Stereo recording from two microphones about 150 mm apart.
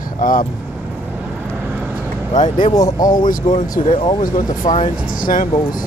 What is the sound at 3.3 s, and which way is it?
Speech, 50° left (ahead or behind).